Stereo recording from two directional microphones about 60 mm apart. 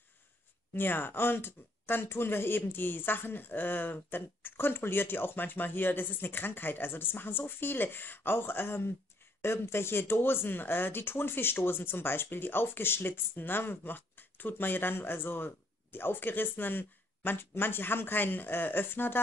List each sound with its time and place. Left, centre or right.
0.7 s speech: left